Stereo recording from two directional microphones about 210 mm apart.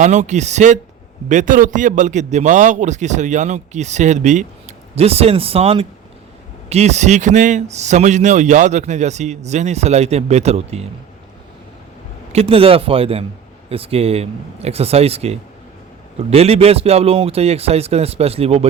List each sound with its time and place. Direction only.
0.0 s speech: 35° right (ahead or behind)
12.3 s speech: 25° right (ahead or behind)